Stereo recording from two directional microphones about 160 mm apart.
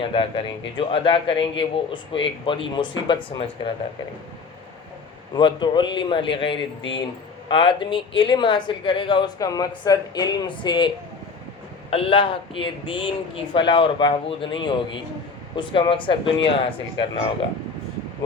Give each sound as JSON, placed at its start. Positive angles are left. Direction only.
{"t": 0.0, "sound": "speech", "side_deg": 35}
{"t": 5.3, "sound": "speech", "side_deg": 30}